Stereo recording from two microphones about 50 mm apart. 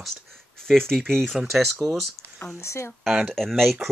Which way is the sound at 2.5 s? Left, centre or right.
Left.